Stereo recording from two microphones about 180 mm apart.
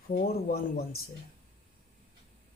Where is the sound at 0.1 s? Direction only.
55° left (ahead or behind).